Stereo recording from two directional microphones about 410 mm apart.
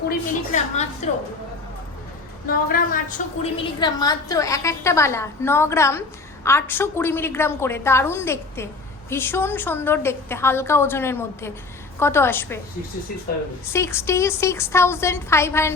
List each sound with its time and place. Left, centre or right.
0.1 s a woman's voice: centre
2.5 s a woman's voice: centre
13.7 s a woman's voice: centre